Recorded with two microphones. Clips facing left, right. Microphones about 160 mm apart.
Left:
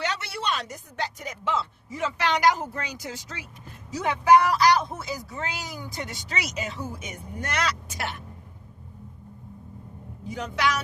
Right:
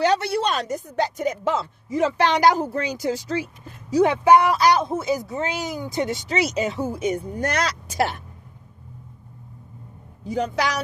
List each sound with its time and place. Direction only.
0.0 s speech: 35° right (ahead or behind)
10.2 s speech: 35° right (ahead or behind)